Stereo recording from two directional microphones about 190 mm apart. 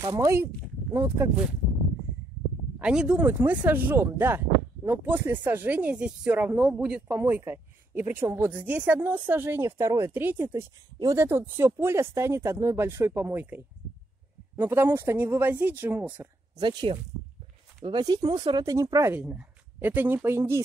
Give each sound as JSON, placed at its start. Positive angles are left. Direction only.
{"t": 0.0, "sound": "speech", "side_deg": -15}
{"t": 2.8, "sound": "speech", "side_deg": -5}
{"t": 14.6, "sound": "speech", "side_deg": -10}
{"t": 16.5, "sound": "speech", "side_deg": -25}